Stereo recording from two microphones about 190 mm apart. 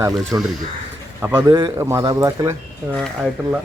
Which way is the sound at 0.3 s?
20° right (ahead or behind).